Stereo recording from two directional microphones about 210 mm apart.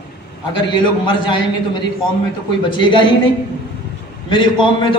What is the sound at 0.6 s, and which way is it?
A man's voice, 20° left (ahead or behind).